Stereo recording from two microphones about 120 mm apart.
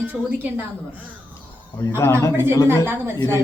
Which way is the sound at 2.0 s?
20° left (ahead or behind).